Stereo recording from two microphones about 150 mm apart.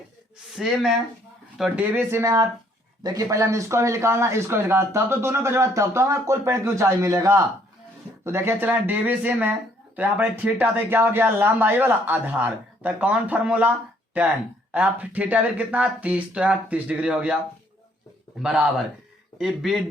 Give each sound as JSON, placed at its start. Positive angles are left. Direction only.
{"t": 0.5, "sound": "speech", "side_deg": 0}
{"t": 19.4, "sound": "speech", "side_deg": 0}